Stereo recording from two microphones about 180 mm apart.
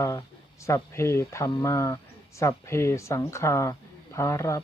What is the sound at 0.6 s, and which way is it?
Speech, 15° left (ahead or behind).